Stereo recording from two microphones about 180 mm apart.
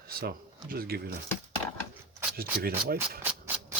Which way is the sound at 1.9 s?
10° right (ahead or behind).